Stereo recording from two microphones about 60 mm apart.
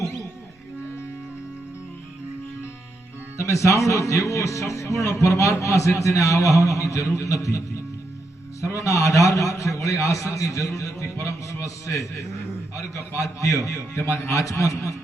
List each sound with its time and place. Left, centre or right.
3.3 s a man's voice: left
8.6 s a man's voice: left
13.9 s a man's voice: left